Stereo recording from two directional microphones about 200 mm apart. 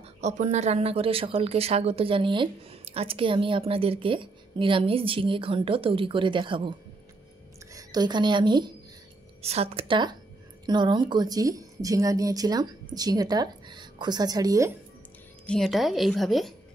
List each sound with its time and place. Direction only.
0.0 s speech: 35° right (ahead or behind)
7.7 s speech: 20° right (ahead or behind)
15.4 s a woman's voice: centre (ahead or behind)